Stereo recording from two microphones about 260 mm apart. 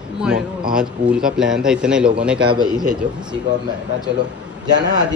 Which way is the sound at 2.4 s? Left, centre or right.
Centre.